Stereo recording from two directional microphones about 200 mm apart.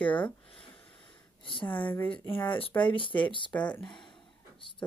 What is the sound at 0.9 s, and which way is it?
Sniff, 25° left (ahead or behind).